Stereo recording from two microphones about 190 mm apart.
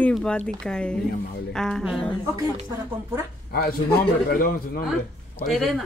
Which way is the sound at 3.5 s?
50° left (ahead or behind).